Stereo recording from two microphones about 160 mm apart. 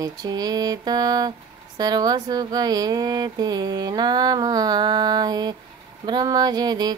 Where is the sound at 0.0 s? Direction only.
25° right (ahead or behind).